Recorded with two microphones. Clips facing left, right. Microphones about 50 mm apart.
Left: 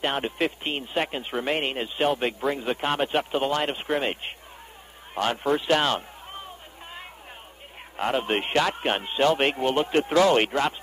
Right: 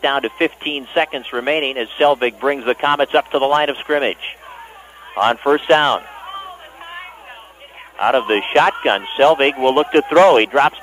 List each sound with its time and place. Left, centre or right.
0.0 s a man's voice: right
5.1 s run: right
8.0 s a man's voice: right